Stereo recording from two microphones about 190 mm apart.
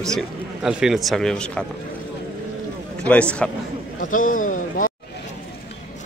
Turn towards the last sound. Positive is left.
turn(degrees=45)  # may be behind; listen again after turning